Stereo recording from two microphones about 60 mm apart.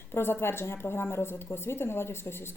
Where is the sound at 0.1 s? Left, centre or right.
Left.